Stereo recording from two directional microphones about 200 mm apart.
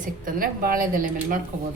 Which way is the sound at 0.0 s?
45° right (ahead or behind).